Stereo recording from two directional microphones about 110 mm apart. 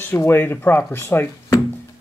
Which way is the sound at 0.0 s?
20° left (ahead or behind).